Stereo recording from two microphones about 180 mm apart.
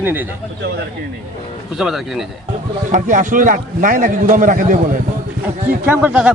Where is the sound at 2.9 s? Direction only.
45° right (ahead or behind).